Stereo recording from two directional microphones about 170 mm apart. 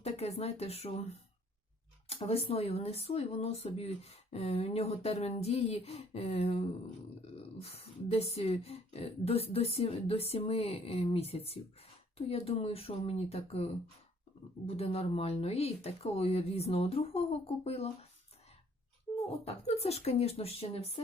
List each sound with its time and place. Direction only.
0.0 s speech: 35° left (ahead or behind)
2.0 s speech: 35° left (ahead or behind)
14.7 s speech: 35° left (ahead or behind)
19.5 s speech: 35° left (ahead or behind)